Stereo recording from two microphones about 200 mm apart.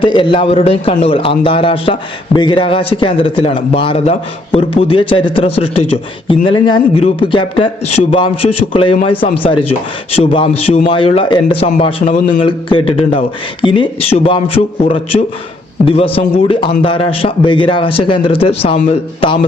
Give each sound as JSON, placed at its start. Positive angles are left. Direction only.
{"t": 0.0, "sound": "a man's voice", "side_deg": 25}
{"t": 8.7, "sound": "a man's voice", "side_deg": 25}